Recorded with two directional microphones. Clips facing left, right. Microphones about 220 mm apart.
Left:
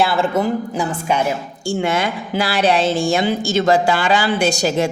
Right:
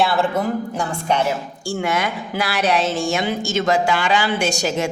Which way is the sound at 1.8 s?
25° left (ahead or behind).